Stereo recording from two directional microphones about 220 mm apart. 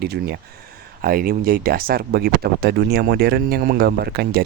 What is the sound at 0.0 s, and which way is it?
Speech, 45° right (ahead or behind).